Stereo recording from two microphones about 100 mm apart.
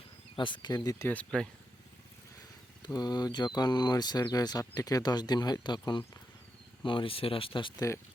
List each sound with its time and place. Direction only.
0.3 s speech: 50° left (ahead or behind)
1.0 s speech: 15° left (ahead or behind)
2.8 s speech: 45° left (ahead or behind); by 7.7 s 60° left (ahead or behind)